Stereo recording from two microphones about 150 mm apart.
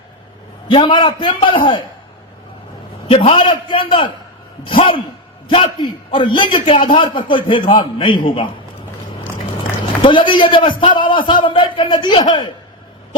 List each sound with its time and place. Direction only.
0.7 s a man's voice: 35° left (ahead or behind)
3.1 s a man's voice: 40° left (ahead or behind)
5.5 s a man's voice: 35° left (ahead or behind)
10.0 s a man's voice: 35° left (ahead or behind)